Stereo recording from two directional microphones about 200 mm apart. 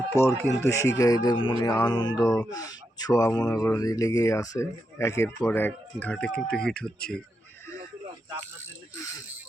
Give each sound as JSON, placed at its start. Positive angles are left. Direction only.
{"t": 0.2, "sound": "speech", "side_deg": 15}
{"t": 2.1, "sound": "speech", "side_deg": 0}
{"t": 2.5, "sound": "speech", "side_deg": 20}